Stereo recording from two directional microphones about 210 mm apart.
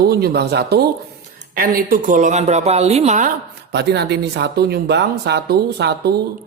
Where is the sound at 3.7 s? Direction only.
55° right (ahead or behind).